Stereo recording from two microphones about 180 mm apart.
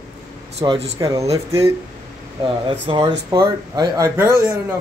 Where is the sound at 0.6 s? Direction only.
35° right (ahead or behind).